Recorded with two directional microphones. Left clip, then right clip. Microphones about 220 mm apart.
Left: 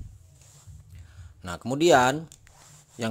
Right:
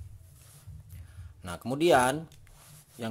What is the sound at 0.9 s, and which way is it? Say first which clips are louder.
Speech: left 2 dB; 15° left (ahead or behind).